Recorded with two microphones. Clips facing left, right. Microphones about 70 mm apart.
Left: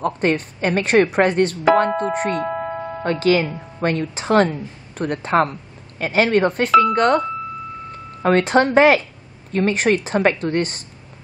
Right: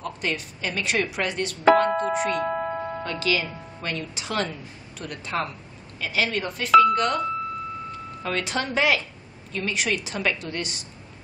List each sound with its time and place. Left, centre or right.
0.0 s a woman's voice: left
2.4 s music: centre
3.0 s a woman's voice: left